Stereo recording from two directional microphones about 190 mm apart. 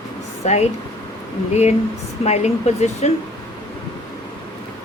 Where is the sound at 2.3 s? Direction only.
35° left (ahead or behind).